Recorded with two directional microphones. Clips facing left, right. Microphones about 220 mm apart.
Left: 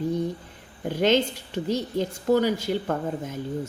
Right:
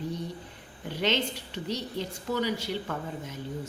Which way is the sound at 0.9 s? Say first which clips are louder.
Left 7 dB; 45° left (ahead or behind).